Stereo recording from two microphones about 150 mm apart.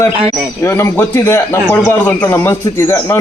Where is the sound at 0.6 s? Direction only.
15° left (ahead or behind).